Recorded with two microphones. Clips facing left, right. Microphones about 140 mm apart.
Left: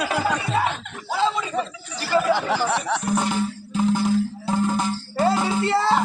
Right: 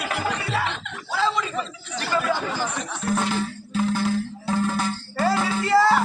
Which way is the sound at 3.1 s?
15° left (ahead or behind).